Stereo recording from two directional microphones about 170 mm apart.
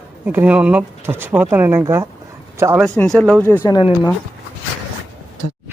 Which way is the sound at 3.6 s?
25° left (ahead or behind).